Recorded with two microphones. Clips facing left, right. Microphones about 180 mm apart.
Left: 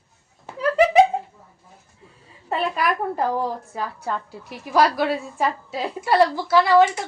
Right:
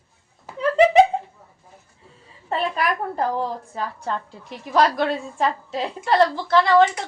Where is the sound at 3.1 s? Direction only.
5° left (ahead or behind).